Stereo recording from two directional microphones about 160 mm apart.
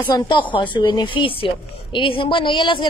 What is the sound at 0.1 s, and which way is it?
A woman's voice, 30° left (ahead or behind).